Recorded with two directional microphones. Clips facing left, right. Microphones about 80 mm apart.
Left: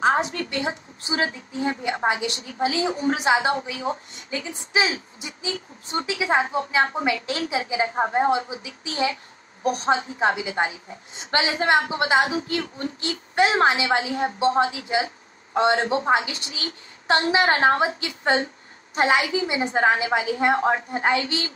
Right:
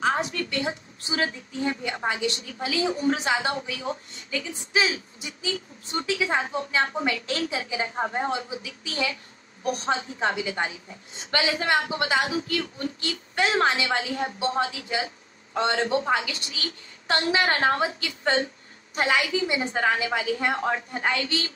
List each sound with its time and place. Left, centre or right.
0.0 s a woman's voice: left